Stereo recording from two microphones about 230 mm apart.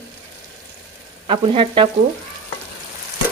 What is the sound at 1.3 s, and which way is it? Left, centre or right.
Sizzle, right.